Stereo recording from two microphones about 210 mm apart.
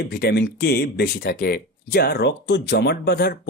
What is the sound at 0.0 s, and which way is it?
Speech, 50° left (ahead or behind).